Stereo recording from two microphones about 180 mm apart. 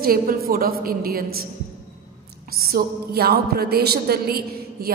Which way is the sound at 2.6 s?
60° right (ahead or behind).